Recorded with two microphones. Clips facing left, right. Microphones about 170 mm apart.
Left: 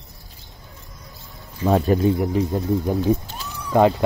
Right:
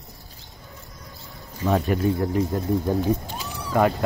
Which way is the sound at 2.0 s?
20° left (ahead or behind).